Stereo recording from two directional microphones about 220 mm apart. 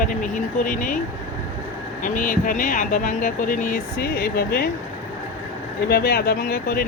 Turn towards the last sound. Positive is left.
turn(degrees=45)  # may be behind; listen again after turning